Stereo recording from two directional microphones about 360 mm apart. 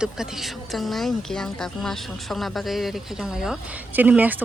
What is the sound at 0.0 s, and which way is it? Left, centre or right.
Speech, centre.